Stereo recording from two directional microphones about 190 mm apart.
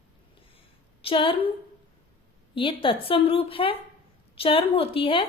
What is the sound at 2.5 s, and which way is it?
A woman's voice, 25° left (ahead or behind).